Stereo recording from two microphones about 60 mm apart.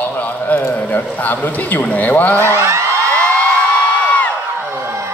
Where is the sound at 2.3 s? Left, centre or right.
Right.